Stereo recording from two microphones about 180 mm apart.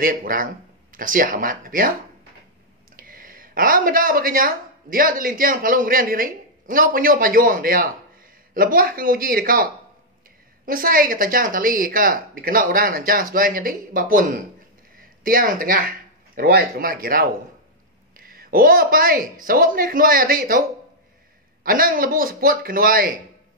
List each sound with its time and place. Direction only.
0.0 s speech: 50° right (ahead or behind)
3.0 s speech: 50° right (ahead or behind)
21.6 s speech: 55° right (ahead or behind)